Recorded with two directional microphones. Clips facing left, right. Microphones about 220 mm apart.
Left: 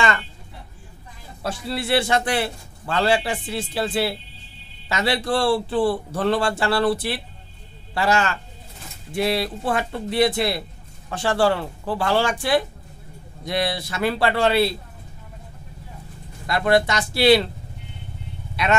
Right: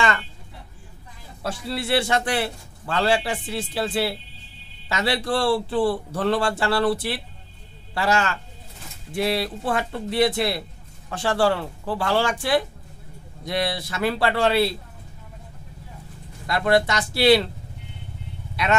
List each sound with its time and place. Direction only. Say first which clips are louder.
1.4 s a man's voice: left 1 dB; 15° left (ahead or behind)
16.4 s a man's voice: left 1 dB; 15° left (ahead or behind)